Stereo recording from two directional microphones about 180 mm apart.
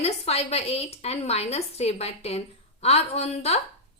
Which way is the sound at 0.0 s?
35° left (ahead or behind).